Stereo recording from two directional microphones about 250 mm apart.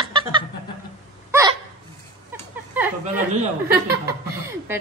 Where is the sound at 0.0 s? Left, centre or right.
Centre.